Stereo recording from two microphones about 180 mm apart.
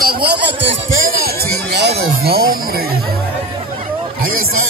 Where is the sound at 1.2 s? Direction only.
60° right (ahead or behind).